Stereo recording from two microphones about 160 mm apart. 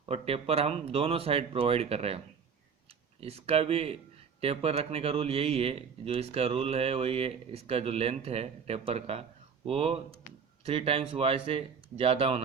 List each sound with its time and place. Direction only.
0.0 s speech: 40° right (ahead or behind)